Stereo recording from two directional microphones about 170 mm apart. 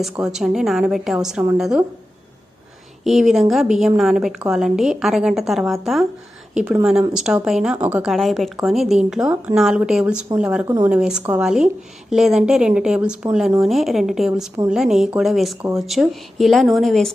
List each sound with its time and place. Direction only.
0.0 s speech: 5° right (ahead or behind)
3.0 s speech: centre (ahead or behind)